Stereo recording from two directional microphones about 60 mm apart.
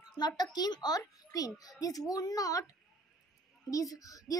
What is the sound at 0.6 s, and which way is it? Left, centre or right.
A child's voice, left.